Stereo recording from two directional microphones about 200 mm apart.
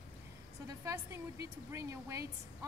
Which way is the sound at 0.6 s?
15° right (ahead or behind).